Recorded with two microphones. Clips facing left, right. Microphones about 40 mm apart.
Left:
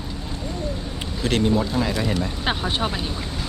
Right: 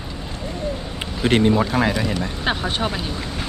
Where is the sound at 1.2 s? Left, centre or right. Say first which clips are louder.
Right 5 dB; right.